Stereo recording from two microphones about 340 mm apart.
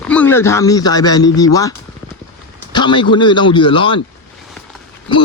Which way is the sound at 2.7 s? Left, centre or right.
Centre.